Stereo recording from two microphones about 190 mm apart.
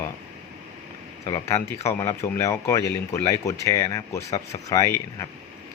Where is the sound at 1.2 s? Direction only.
20° left (ahead or behind).